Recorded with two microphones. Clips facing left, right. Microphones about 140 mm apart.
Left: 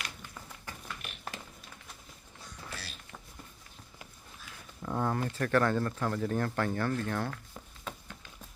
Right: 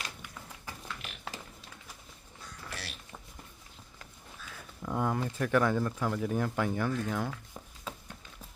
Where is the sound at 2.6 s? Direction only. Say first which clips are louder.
Right 2 dB; 80° right.